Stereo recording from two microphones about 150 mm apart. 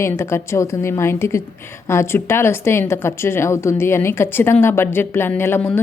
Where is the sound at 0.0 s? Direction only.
15° left (ahead or behind).